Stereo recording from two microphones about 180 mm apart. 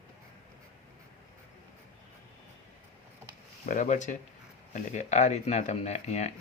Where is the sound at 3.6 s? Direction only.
45° left (ahead or behind).